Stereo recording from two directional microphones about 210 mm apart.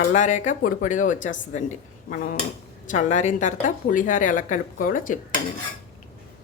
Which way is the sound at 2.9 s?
35° left (ahead or behind).